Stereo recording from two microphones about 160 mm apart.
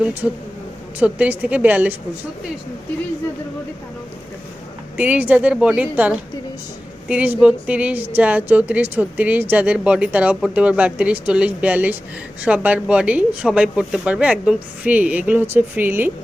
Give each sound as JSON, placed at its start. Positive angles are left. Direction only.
{"t": 0.0, "sound": "a woman's voice", "side_deg": -10}
{"t": 4.9, "sound": "a woman's voice", "side_deg": -10}